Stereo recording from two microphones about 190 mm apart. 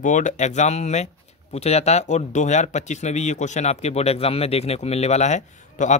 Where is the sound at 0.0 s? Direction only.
40° left (ahead or behind).